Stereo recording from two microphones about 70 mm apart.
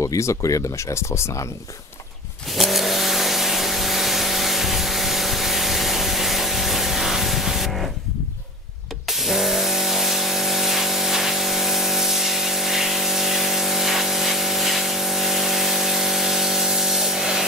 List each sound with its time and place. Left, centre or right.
0.0 s speech: left
2.5 s vehicle: centre
9.1 s spray: centre